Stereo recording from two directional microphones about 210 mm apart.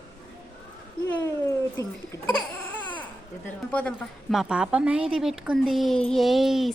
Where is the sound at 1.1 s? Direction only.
15° left (ahead or behind).